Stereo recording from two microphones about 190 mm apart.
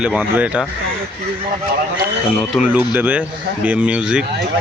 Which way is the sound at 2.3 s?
5° right (ahead or behind).